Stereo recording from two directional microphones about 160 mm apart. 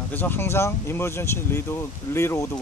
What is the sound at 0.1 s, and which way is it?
Speech, 10° left (ahead or behind).